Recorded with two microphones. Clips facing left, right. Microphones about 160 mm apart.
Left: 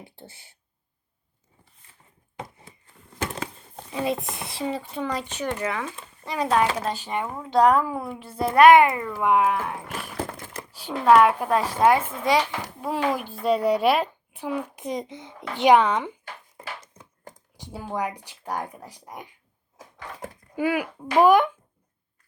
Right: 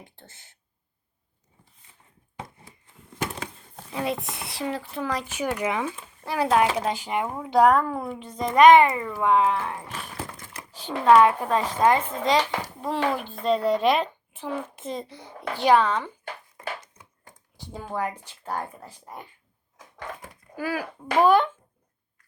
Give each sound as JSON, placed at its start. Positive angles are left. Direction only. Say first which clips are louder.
{"t": 0.0, "sound": "speech", "louder": "left 4 dB", "side_deg": 10}
{"t": 3.8, "sound": "speech", "louder": "left 2 dB", "side_deg": 0}
{"t": 7.7, "sound": "speech", "louder": "even", "side_deg": 5}
{"t": 9.0, "sound": "speech", "louder": "even", "side_deg": 0}
{"t": 9.2, "sound": "speech", "louder": "even", "side_deg": 10}
{"t": 10.2, "sound": "a sound", "louder": "left 5 dB", "side_deg": 45}
{"t": 10.7, "sound": "speech", "louder": "even", "side_deg": 10}
{"t": 17.6, "sound": "speech", "louder": "left 1 dB", "side_deg": 10}
{"t": 20.6, "sound": "speech", "louder": "left 5 dB", "side_deg": 20}